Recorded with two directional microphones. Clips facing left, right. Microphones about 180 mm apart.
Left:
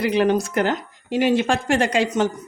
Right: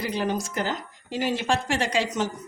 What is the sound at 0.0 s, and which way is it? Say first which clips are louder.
Speech: left 8 dB; 70° left (ahead or behind).